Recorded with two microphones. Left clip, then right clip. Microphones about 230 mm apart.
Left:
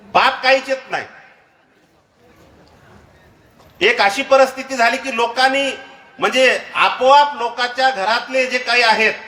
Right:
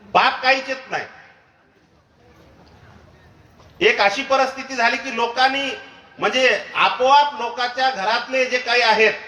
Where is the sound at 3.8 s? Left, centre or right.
Left.